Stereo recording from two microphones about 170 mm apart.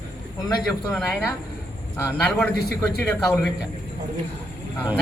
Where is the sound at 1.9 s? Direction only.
15° left (ahead or behind).